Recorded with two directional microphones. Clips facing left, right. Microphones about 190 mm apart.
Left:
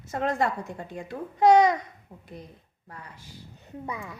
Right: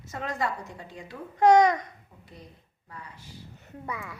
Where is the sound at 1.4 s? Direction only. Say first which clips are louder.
Even; 10° left (ahead or behind).